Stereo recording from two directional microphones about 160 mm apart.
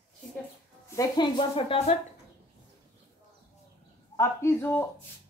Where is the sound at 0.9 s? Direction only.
25° left (ahead or behind).